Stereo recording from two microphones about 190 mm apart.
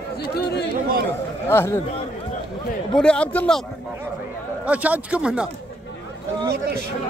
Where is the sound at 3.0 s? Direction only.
5° left (ahead or behind).